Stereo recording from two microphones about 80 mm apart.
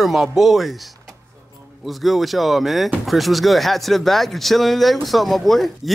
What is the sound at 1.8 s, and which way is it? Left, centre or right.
Speech, centre.